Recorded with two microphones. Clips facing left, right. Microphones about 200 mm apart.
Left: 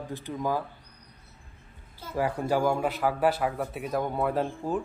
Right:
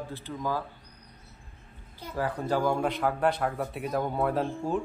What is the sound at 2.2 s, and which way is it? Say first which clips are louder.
A man's voice: left 2 dB; 10° left (ahead or behind).